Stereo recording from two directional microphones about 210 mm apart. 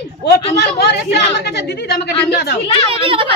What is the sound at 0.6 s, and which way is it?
Speech, 50° left (ahead or behind).